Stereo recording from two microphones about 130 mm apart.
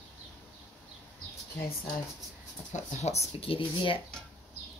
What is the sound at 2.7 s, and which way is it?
Speech, 65° left (ahead or behind).